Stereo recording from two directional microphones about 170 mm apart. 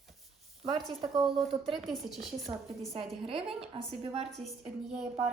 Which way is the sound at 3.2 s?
35° right (ahead or behind).